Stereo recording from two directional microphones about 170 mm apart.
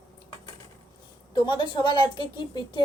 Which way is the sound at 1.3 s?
25° left (ahead or behind).